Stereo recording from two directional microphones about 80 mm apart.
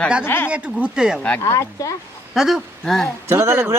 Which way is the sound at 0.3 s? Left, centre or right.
Left.